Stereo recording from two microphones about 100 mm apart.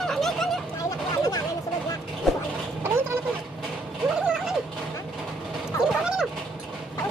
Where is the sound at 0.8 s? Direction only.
35° left (ahead or behind).